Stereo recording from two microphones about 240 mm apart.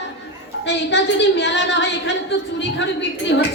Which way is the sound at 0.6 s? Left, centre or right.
Left.